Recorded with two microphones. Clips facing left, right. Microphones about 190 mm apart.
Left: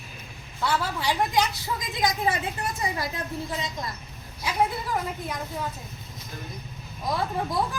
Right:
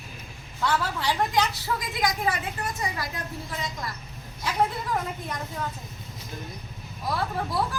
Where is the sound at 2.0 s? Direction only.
20° left (ahead or behind).